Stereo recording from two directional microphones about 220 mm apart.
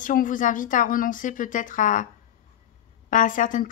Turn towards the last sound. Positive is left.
turn(degrees=35)  # may be behind; listen again after turning